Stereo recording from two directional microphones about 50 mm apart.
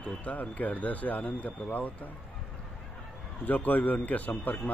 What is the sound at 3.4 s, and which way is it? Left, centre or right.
Speech, left.